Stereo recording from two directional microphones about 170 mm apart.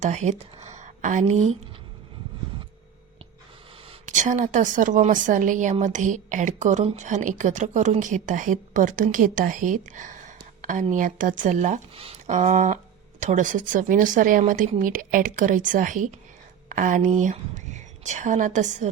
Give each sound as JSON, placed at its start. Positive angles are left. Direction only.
{"t": 0.0, "sound": "speech", "side_deg": -45}
{"t": 4.0, "sound": "a woman's voice", "side_deg": -45}